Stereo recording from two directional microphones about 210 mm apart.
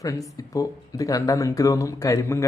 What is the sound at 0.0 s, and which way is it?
Speech, 15° left (ahead or behind).